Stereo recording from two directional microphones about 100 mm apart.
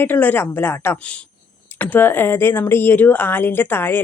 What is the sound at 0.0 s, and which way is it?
Speech, 20° left (ahead or behind).